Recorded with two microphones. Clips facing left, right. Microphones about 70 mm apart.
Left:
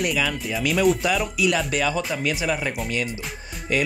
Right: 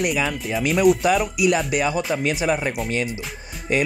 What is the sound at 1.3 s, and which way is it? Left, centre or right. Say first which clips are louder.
Speech: right 2 dB; centre.